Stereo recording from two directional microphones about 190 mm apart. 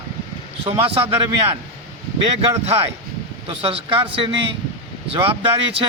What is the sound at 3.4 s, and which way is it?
Speech, 30° right (ahead or behind).